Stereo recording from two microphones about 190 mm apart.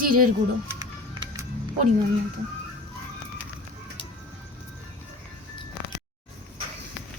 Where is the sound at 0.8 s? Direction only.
20° right (ahead or behind).